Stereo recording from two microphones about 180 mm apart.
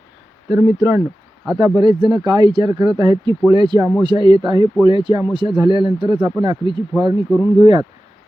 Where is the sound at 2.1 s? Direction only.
25° right (ahead or behind).